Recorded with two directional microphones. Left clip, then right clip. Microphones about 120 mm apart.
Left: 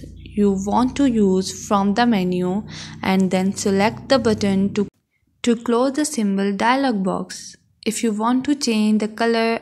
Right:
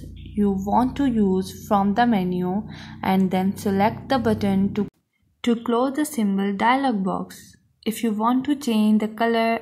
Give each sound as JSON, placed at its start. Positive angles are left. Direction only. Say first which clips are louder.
{"t": 0.4, "sound": "a woman's voice", "louder": "left 2 dB", "side_deg": 25}
{"t": 5.7, "sound": "a woman's voice", "louder": "left 3 dB", "side_deg": 40}